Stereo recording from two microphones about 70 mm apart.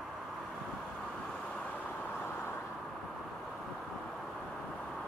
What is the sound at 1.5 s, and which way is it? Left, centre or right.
Vehicle, left.